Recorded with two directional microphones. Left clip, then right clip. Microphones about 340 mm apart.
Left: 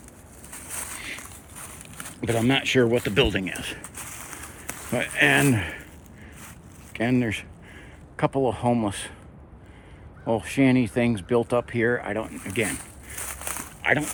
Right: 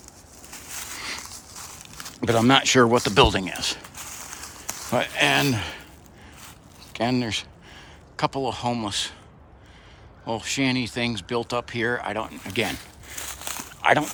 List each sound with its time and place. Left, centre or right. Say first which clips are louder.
2.2 s speech: right 5 dB; right
3.9 s a sound: right 1 dB; centre
4.9 s speech: even; centre
6.9 s speech: even; centre
10.2 s speech: left 3 dB; centre
13.2 s a sound: even; centre
13.8 s speech: right 4 dB; centre